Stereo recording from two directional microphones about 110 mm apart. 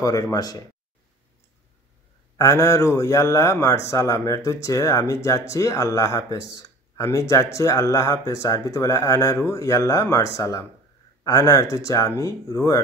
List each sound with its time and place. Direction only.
0.0 s speech: 35° left (ahead or behind)
2.3 s speech: 30° left (ahead or behind)